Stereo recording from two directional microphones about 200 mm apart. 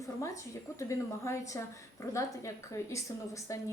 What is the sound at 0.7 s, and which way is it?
Speech, 15° left (ahead or behind).